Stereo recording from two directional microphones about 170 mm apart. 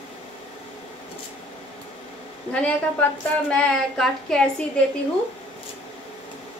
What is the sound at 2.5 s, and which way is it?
A woman's voice, 5° left (ahead or behind).